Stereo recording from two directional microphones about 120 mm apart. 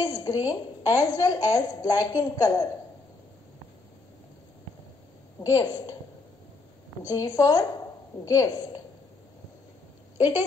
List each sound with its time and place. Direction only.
0.0 s a woman's voice: 30° left (ahead or behind)
5.4 s a woman's voice: 30° left (ahead or behind)
7.1 s a woman's voice: 30° left (ahead or behind)